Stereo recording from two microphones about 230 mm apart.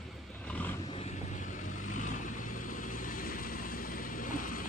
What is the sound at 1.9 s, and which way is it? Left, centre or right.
Vehicle, left.